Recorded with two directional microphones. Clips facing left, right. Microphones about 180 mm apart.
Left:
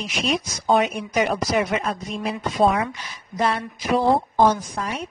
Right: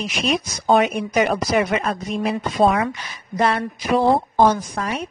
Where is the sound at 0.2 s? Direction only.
65° right (ahead or behind).